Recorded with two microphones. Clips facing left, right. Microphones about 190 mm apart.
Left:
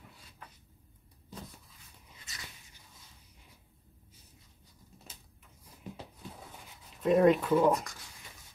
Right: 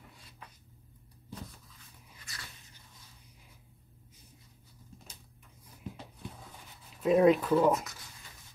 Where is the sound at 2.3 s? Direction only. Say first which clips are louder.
Right 1 dB; 20° left (ahead or behind).